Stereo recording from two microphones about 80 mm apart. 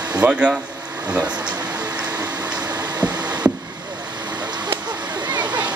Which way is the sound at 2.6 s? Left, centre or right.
Right.